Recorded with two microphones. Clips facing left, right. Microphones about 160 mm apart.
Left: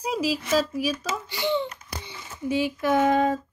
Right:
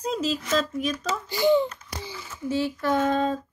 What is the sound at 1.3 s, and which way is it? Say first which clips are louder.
Speech: right 7 dB; 45° right (ahead or behind).